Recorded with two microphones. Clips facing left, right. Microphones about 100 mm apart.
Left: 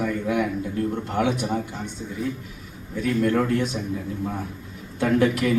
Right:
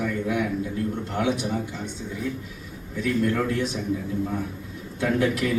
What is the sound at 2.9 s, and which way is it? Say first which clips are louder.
Speech: left 2 dB; 50° left (ahead or behind).